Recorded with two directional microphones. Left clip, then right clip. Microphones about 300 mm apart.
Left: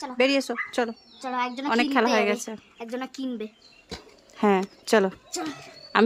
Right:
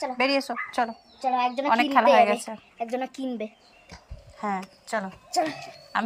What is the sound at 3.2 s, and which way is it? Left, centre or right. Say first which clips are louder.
Speech: right 1 dB; centre.